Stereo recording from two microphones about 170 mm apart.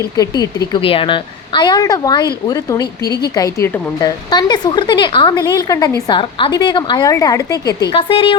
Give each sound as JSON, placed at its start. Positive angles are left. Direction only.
{"t": 0.2, "sound": "speech", "side_deg": 25}
{"t": 7.9, "sound": "a woman's voice", "side_deg": 35}